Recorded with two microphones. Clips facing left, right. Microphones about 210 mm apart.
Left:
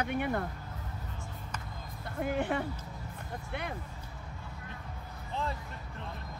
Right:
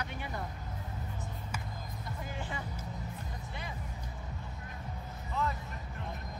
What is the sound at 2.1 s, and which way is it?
Speech, 60° left (ahead or behind).